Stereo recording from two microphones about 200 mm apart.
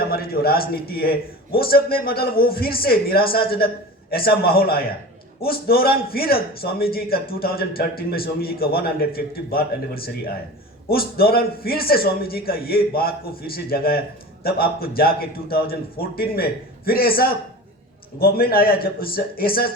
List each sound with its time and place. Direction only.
0.1 s a man's voice: 50° left (ahead or behind)